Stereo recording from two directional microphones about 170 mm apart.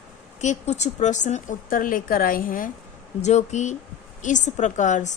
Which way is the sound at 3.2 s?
40° left (ahead or behind).